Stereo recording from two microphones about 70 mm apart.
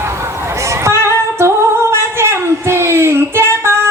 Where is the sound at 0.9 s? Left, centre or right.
Right.